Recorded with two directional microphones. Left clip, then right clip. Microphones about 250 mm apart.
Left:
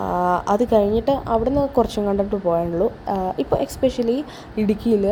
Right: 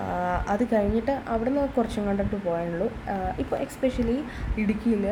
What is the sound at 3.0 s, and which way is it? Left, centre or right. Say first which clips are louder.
A woman's voice: left 7 dB; centre.